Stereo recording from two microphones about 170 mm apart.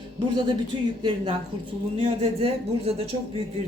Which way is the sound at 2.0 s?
35° right (ahead or behind).